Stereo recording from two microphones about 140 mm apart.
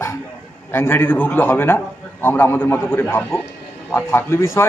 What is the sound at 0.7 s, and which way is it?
A man's voice, 15° left (ahead or behind).